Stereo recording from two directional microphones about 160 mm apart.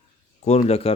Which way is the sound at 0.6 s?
40° left (ahead or behind).